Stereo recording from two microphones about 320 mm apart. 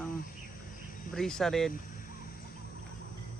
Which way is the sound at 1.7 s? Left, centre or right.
Left.